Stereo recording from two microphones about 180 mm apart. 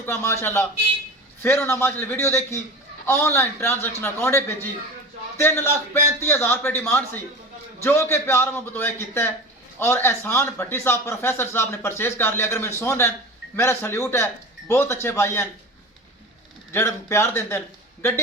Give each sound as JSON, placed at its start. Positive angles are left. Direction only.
{"t": 0.0, "sound": "speech", "side_deg": 15}
{"t": 16.7, "sound": "speech", "side_deg": 15}